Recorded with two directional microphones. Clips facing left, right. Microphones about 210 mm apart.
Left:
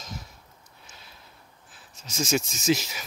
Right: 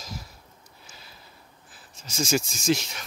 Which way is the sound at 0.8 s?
Centre (ahead or behind).